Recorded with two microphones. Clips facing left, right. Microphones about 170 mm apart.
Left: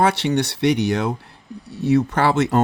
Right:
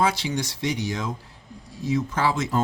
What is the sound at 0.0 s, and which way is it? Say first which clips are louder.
Speech: left 6 dB; 65° left (ahead or behind).